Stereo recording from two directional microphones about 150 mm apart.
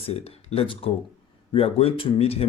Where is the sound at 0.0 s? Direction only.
40° left (ahead or behind).